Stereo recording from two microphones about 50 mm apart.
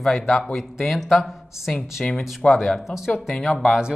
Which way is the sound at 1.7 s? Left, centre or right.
Centre.